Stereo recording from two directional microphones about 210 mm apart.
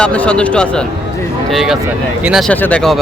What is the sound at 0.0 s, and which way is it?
Speech, 5° left (ahead or behind).